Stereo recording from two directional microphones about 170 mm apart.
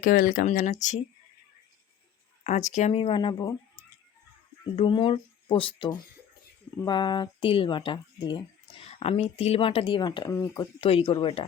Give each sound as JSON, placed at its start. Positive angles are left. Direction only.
{"t": 0.0, "sound": "speech", "side_deg": 55}
{"t": 2.4, "sound": "speech", "side_deg": 45}
{"t": 10.8, "sound": "speech", "side_deg": 35}